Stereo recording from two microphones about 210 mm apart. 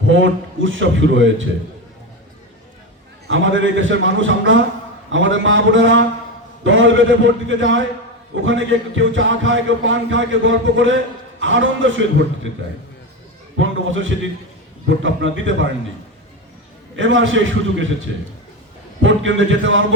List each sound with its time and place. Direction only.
0.1 s speech: 65° right (ahead or behind)
3.2 s speech: 65° right (ahead or behind)
13.6 s speech: 65° right (ahead or behind)
17.0 s speech: 65° right (ahead or behind)